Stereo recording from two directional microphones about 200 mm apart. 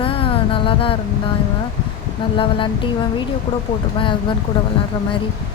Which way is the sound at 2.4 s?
25° left (ahead or behind).